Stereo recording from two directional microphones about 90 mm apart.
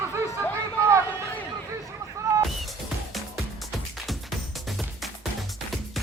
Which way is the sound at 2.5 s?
Centre (ahead or behind).